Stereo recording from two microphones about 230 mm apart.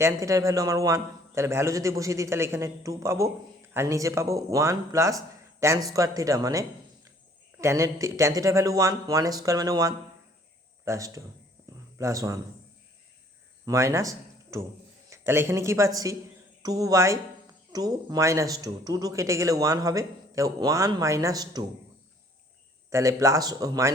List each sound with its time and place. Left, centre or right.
0.0 s speech: centre
11.6 s a sound: centre
11.9 s speech: centre
13.7 s speech: centre
22.9 s speech: centre